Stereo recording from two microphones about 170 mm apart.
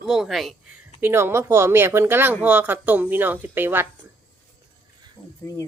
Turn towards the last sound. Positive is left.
turn(degrees=15)  # may be behind; listen again after turning